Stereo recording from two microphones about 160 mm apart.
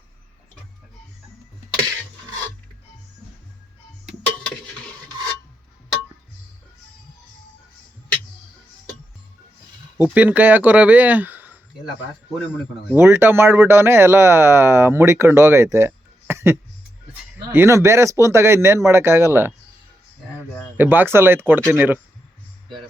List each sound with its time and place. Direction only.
10.0 s speech: 10° right (ahead or behind)
12.9 s speech: 15° right (ahead or behind)
20.7 s speech: 10° right (ahead or behind)